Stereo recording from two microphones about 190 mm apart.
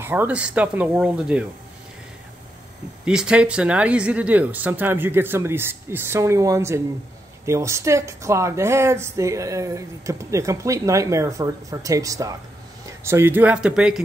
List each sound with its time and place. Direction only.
0.0 s speech: 10° right (ahead or behind)
3.1 s speech: 5° right (ahead or behind)